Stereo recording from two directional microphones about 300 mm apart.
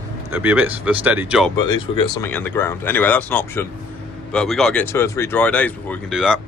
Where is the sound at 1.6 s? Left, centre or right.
Centre.